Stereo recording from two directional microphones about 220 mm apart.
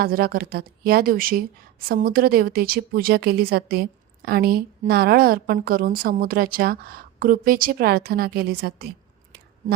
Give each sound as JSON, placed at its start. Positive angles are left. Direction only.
{"t": 0.0, "sound": "a woman's voice", "side_deg": -45}